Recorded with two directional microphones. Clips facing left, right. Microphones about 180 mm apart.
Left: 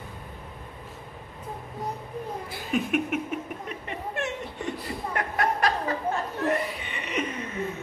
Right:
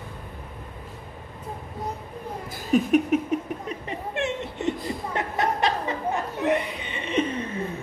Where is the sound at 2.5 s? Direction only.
40° right (ahead or behind).